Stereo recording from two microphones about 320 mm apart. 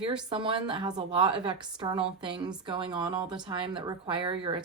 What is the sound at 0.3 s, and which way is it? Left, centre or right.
A woman's voice, centre.